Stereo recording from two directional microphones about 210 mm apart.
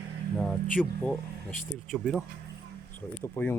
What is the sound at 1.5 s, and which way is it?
Speech, 40° left (ahead or behind).